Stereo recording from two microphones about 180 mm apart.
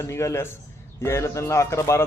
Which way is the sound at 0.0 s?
15° left (ahead or behind).